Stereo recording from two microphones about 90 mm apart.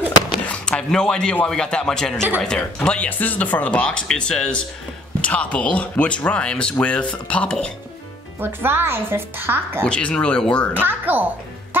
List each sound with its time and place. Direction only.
0.5 s a sound: 10° left (ahead or behind)
1.4 s speech: 5° left (ahead or behind)
8.4 s a woman's voice: 25° right (ahead or behind)
9.8 s speech: 10° left (ahead or behind)
10.7 s a woman's voice: 20° right (ahead or behind)